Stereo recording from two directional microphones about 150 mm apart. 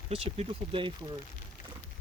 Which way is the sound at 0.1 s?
40° right (ahead or behind).